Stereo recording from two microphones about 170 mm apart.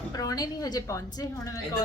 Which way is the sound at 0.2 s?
20° left (ahead or behind).